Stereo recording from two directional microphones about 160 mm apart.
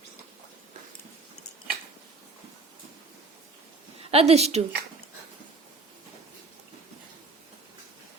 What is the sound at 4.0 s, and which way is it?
Speech, 40° right (ahead or behind).